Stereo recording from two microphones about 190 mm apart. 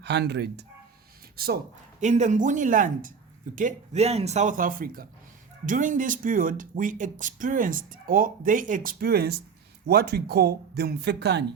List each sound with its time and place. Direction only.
0.0 s speech: 60° right (ahead or behind)
2.0 s speech: 40° right (ahead or behind); by 11.4 s 60° right (ahead or behind)